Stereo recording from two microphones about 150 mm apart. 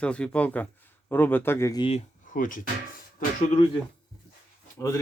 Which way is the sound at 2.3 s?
65° left (ahead or behind).